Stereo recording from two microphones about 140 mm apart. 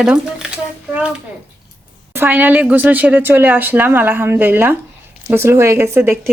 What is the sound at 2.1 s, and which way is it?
A woman's voice, 15° right (ahead or behind).